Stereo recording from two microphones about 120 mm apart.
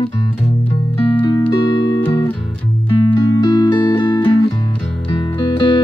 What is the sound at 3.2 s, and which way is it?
Music, 35° left (ahead or behind).